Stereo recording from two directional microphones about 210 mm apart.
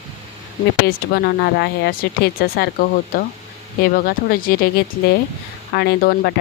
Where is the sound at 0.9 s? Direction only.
50° left (ahead or behind).